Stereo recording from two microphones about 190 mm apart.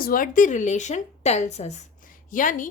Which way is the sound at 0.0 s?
45° left (ahead or behind).